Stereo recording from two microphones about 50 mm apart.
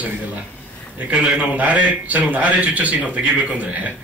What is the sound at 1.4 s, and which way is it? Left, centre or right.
Speech, right.